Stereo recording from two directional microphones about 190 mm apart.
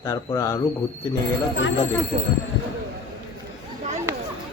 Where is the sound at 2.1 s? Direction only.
40° right (ahead or behind).